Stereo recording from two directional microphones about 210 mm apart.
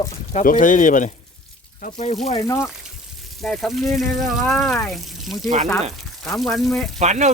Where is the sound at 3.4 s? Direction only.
Centre (ahead or behind).